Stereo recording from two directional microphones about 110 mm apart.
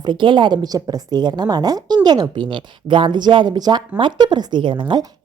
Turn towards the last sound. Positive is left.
turn(degrees=-50)  # may be behind; listen again after turning